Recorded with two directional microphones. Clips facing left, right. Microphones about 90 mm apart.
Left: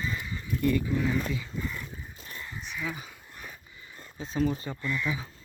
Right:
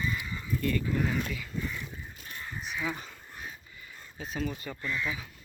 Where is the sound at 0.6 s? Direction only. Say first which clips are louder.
Left 3 dB; 15° left (ahead or behind).